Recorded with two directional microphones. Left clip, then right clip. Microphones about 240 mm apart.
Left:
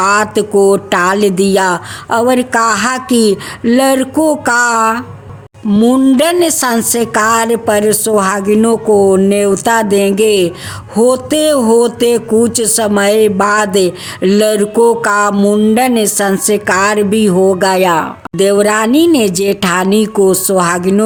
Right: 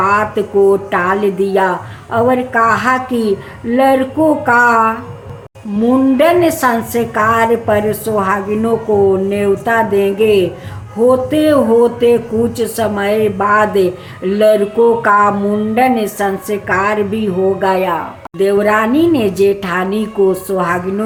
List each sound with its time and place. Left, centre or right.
0.0 s speech: left